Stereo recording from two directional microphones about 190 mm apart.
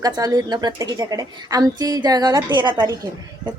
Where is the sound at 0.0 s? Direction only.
20° right (ahead or behind).